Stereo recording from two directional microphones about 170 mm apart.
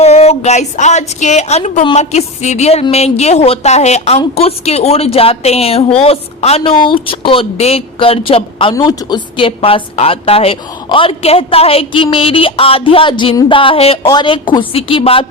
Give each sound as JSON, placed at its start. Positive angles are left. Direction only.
{"t": 0.0, "sound": "a woman's voice", "side_deg": 40}